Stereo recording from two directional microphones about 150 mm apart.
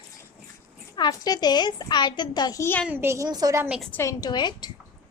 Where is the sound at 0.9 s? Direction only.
25° left (ahead or behind).